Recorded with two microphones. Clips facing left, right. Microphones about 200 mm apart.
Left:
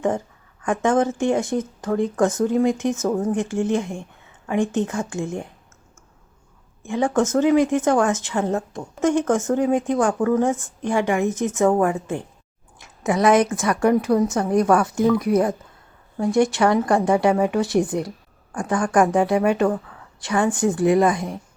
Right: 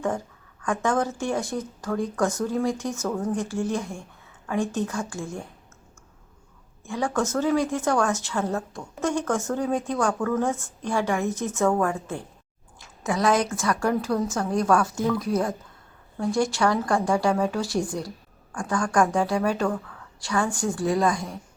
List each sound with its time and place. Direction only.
0.6 s a woman's voice: 20° left (ahead or behind)
6.8 s a woman's voice: 20° left (ahead or behind)